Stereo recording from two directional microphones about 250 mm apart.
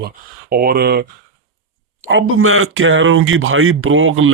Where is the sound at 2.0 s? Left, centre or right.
Right.